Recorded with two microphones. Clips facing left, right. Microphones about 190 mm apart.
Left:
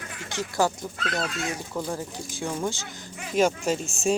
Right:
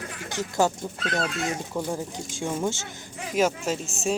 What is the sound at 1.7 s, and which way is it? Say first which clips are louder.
Speech: right 1 dB; 10° right (ahead or behind).